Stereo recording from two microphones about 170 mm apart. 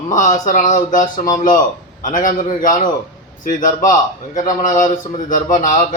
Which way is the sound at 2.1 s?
50° left (ahead or behind).